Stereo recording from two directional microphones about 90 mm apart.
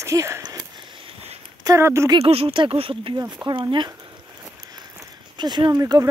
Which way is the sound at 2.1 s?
90° right.